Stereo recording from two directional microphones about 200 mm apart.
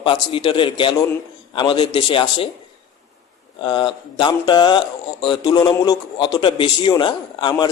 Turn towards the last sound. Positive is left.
turn(degrees=20)  # may be behind; listen again after turning